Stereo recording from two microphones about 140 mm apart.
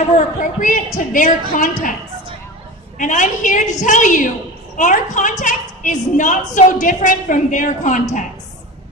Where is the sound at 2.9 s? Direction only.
65° left (ahead or behind).